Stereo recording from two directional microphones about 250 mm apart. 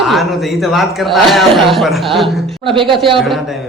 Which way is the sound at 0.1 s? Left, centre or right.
Centre.